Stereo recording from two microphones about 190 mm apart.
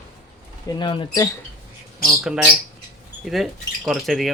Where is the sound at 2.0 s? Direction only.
Centre (ahead or behind).